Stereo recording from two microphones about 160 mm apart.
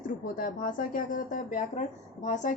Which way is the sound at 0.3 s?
60° left (ahead or behind).